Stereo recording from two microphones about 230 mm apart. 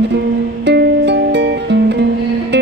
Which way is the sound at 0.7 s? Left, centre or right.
Right.